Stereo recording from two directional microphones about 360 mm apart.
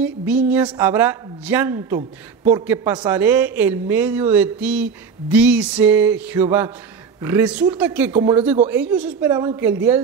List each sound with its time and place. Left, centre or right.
0.0 s a man's voice: centre
2.0 s speech: centre
2.6 s a man's voice: centre
8.1 s a man's voice: centre